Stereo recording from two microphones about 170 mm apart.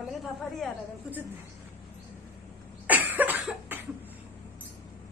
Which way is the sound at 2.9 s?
10° right (ahead or behind).